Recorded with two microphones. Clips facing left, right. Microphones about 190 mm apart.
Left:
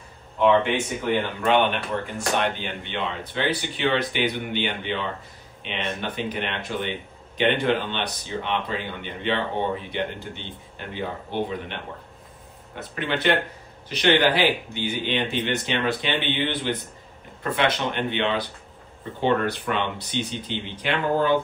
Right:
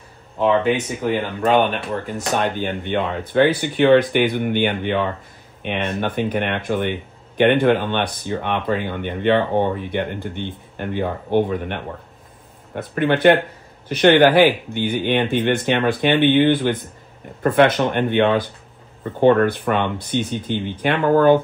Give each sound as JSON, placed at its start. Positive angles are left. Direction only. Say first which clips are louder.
{"t": 0.4, "sound": "speech", "louder": "right 2 dB", "side_deg": -40}
{"t": 2.1, "sound": "speech", "louder": "right 4 dB", "side_deg": -40}